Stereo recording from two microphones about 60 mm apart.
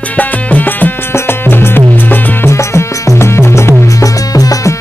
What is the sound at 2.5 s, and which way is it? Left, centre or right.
Music, left.